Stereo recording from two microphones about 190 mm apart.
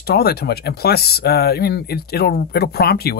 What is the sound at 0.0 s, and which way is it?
Speech, 55° left (ahead or behind).